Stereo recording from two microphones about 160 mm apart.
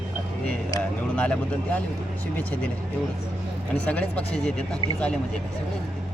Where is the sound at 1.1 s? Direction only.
5° left (ahead or behind).